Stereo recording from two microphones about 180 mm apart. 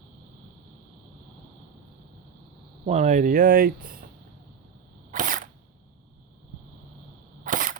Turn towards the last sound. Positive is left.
turn(degrees=-50)  # may be behind; listen again after turning